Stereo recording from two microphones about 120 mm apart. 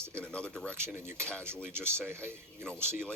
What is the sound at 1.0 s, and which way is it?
Speech, 20° right (ahead or behind).